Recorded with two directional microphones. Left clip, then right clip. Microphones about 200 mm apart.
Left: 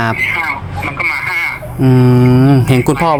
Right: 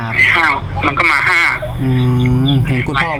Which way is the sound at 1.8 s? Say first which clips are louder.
Left 9 dB; 40° left (ahead or behind).